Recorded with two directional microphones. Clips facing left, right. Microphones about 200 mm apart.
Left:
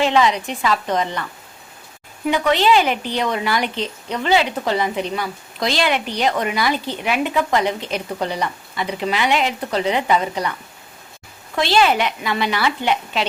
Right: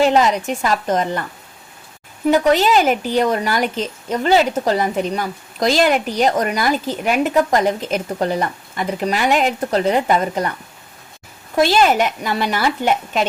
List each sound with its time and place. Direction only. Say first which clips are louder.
0.0 s a woman's voice: right 2 dB; 45° right (ahead or behind)
2.5 s a woman's voice: left 2 dB; 45° right (ahead or behind)
11.5 s a woman's voice: right 3 dB; 45° right (ahead or behind)